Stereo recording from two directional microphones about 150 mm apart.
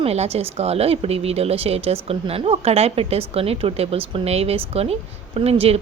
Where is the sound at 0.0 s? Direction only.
45° right (ahead or behind).